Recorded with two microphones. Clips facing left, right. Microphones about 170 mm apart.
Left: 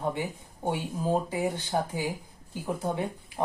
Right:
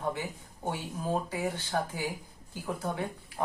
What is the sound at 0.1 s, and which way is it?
Speech, 20° left (ahead or behind).